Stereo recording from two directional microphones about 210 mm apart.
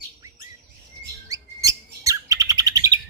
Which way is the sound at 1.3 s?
15° right (ahead or behind).